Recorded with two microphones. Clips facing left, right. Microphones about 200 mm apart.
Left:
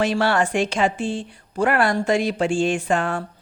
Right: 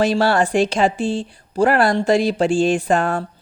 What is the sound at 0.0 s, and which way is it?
Speech, 35° right (ahead or behind).